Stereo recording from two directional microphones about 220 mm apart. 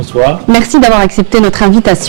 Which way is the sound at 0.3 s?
5° left (ahead or behind).